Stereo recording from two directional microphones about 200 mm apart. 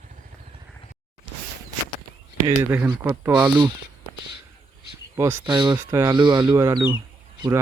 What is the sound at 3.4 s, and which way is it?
Speech, 25° right (ahead or behind).